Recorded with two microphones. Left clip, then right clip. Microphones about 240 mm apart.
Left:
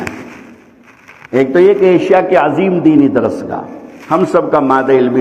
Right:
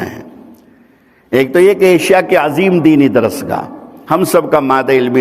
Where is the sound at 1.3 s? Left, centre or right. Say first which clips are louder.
Even; right.